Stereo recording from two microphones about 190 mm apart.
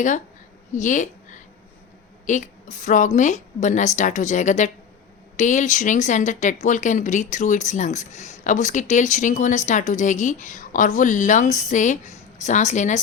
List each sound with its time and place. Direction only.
0.7 s a woman's voice: 40° left (ahead or behind)